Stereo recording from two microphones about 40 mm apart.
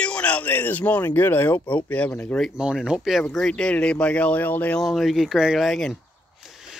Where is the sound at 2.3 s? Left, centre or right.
Left.